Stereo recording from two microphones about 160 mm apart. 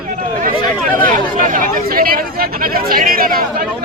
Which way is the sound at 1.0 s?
55° right (ahead or behind).